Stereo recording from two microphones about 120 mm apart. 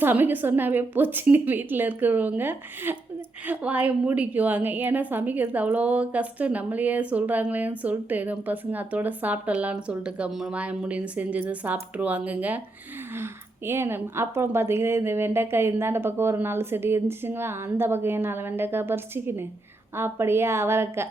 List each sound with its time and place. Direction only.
0.0 s a woman's voice: 15° right (ahead or behind)
13.7 s a woman's voice: 20° right (ahead or behind)